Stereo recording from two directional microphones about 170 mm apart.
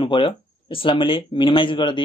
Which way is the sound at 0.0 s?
30° left (ahead or behind).